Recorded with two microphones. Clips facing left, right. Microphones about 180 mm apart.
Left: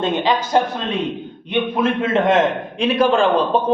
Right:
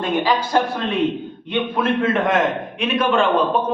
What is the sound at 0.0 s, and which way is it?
A man's voice, 20° left (ahead or behind).